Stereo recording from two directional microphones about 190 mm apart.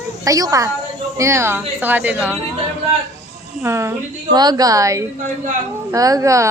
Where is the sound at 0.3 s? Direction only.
20° right (ahead or behind).